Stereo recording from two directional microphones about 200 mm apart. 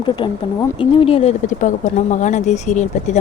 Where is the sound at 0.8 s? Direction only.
25° left (ahead or behind).